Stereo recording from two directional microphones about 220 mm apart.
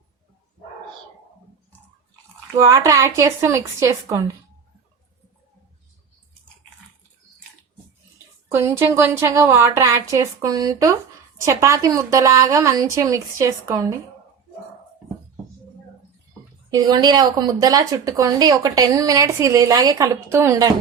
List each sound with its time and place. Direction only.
2.6 s speech: 15° right (ahead or behind)
8.5 s speech: 10° right (ahead or behind)
16.7 s speech: 20° right (ahead or behind)